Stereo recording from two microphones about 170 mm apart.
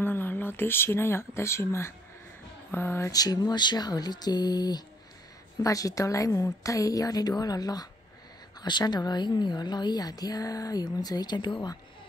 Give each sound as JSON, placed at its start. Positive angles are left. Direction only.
{"t": 0.0, "sound": "a woman's voice", "side_deg": 10}